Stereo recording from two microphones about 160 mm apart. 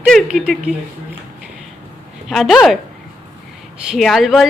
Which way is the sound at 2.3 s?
Centre (ahead or behind).